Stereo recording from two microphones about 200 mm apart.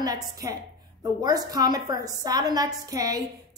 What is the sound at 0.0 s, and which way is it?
A woman's voice, 15° right (ahead or behind).